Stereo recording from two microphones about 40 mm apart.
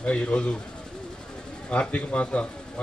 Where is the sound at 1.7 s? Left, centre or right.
Left.